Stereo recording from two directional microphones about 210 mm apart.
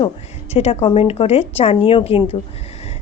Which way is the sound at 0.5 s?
30° left (ahead or behind).